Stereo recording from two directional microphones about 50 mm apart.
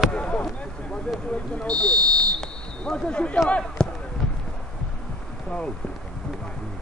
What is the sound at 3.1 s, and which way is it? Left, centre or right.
Speech, left.